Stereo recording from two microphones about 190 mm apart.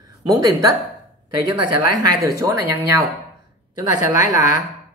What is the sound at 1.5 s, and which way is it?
Speech, 20° right (ahead or behind).